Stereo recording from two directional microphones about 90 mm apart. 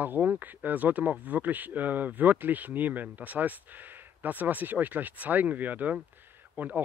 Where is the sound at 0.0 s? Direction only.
20° right (ahead or behind).